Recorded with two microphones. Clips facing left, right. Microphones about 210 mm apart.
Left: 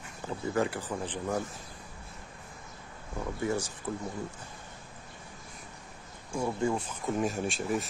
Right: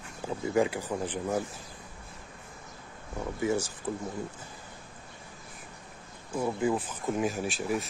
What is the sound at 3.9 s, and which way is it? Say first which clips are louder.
Speech: right 1 dB; 10° right (ahead or behind).